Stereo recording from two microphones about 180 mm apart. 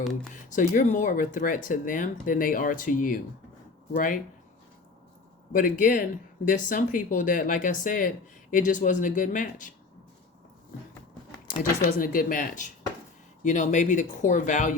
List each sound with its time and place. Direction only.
0.5 s speech: 45° left (ahead or behind)
5.5 s speech: 50° left (ahead or behind)
11.9 s speech: 50° left (ahead or behind)